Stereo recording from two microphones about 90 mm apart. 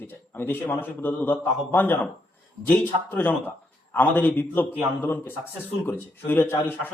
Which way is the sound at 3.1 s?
20° left (ahead or behind).